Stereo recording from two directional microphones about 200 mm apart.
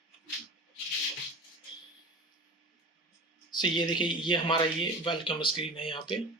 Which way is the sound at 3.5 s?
25° left (ahead or behind).